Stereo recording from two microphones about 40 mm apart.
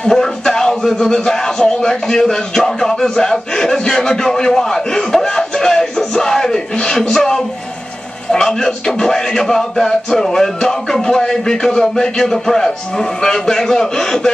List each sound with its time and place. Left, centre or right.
0.1 s music: centre
0.9 s speech: centre